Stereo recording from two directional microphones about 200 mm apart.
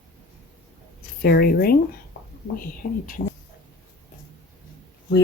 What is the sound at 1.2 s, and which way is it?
Speech, 50° left (ahead or behind).